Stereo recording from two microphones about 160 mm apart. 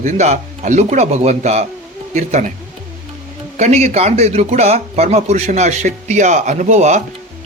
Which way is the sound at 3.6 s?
45° right (ahead or behind).